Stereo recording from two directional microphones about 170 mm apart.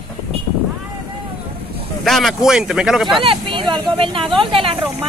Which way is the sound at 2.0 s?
Centre (ahead or behind).